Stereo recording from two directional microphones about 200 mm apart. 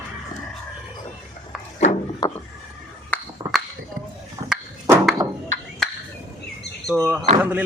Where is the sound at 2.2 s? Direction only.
20° left (ahead or behind).